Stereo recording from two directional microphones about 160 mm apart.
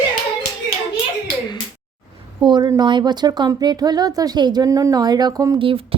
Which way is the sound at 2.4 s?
25° right (ahead or behind).